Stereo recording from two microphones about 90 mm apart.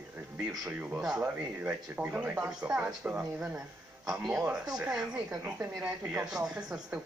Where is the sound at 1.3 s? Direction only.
20° right (ahead or behind).